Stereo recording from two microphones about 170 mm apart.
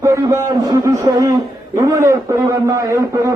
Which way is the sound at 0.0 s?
15° right (ahead or behind).